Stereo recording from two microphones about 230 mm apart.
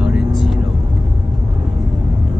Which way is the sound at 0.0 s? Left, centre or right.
Centre.